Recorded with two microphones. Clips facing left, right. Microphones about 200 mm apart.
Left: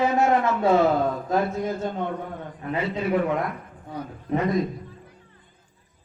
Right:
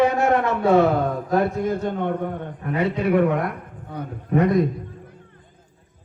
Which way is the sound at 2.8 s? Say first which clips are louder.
Right 5 dB; 60° right (ahead or behind).